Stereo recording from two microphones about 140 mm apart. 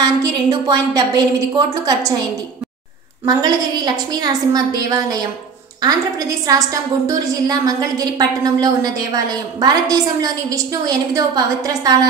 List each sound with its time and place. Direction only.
0.0 s a woman's voice: 25° right (ahead or behind)
3.3 s a woman's voice: 30° right (ahead or behind)